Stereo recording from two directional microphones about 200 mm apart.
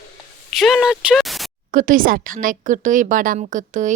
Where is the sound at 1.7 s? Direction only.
40° right (ahead or behind).